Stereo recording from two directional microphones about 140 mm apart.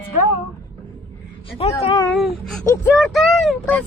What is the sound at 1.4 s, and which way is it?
Speech, 45° left (ahead or behind).